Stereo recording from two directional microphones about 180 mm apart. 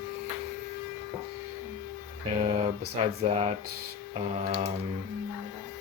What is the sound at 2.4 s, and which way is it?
Typing, 30° right (ahead or behind).